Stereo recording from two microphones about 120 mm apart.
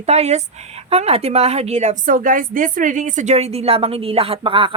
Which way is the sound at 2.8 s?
90° right.